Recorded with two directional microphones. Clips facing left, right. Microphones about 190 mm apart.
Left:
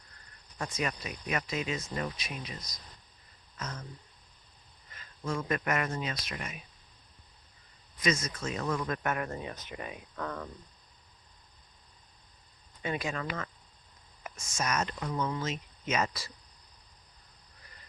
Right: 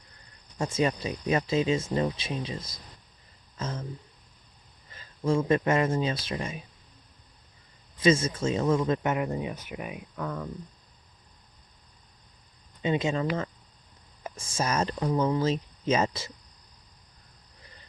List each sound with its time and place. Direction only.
0.6 s speech: 30° right (ahead or behind)
4.9 s speech: 30° right (ahead or behind)
7.9 s speech: 30° right (ahead or behind); by 10.5 s 5° right (ahead or behind)
12.8 s speech: 20° right (ahead or behind)